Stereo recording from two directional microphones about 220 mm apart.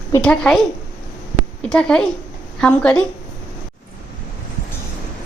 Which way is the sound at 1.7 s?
5° left (ahead or behind).